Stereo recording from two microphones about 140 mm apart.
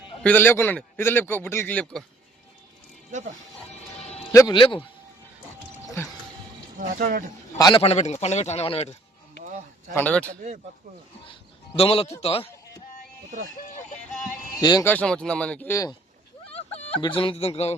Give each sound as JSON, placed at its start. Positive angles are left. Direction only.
{"t": 0.2, "sound": "a man's voice", "side_deg": 10}
{"t": 4.3, "sound": "speech", "side_deg": 25}
{"t": 4.5, "sound": "speech", "side_deg": 35}
{"t": 6.7, "sound": "speech", "side_deg": -80}
{"t": 7.8, "sound": "speech", "side_deg": 50}
{"t": 9.9, "sound": "a man's voice", "side_deg": 10}
{"t": 11.3, "sound": "speech", "side_deg": 40}
{"t": 14.6, "sound": "speech", "side_deg": 30}
{"t": 14.8, "sound": "a man's voice", "side_deg": 10}
{"t": 15.7, "sound": "speech", "side_deg": 25}
{"t": 16.5, "sound": "a sound", "side_deg": 50}
{"t": 17.0, "sound": "speech", "side_deg": 35}